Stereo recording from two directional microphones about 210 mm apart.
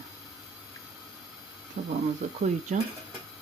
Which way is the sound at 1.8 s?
35° right (ahead or behind).